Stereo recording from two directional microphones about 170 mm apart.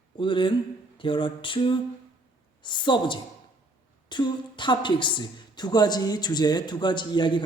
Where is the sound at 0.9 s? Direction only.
30° left (ahead or behind).